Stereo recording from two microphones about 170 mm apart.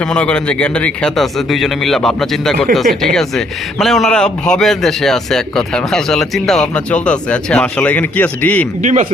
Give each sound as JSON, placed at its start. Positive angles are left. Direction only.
{"t": 0.0, "sound": "a man's voice", "side_deg": 5}
{"t": 8.8, "sound": "speech", "side_deg": -45}